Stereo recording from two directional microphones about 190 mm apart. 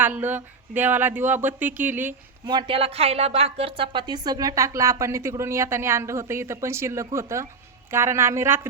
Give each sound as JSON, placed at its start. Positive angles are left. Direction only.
{"t": 0.2, "sound": "a woman's voice", "side_deg": -10}
{"t": 2.5, "sound": "a woman's voice", "side_deg": -25}